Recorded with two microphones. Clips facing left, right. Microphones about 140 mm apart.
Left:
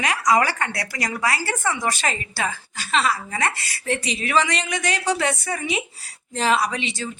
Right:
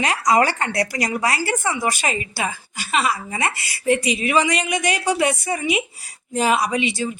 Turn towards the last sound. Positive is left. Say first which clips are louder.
# right 4 dB
turn(degrees=-10)  # may be behind; listen again after turning